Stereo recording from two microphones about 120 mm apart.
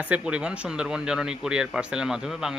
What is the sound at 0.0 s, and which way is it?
A man's voice, 10° right (ahead or behind).